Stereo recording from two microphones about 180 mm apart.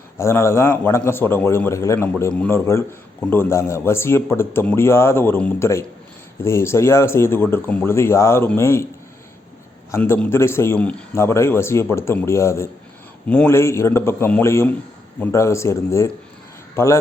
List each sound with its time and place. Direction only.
0.2 s a man's voice: 15° left (ahead or behind)
9.9 s a man's voice: 10° left (ahead or behind)